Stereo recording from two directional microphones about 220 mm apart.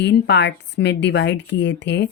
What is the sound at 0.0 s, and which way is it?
A woman's voice, 50° left (ahead or behind).